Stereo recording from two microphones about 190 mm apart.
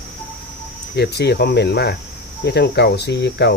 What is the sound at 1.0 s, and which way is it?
Speech, 60° left (ahead or behind).